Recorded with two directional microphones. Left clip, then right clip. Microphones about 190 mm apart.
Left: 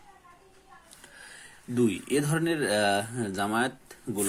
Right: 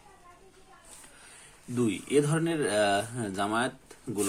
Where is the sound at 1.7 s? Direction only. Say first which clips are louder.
Even; 20° left (ahead or behind).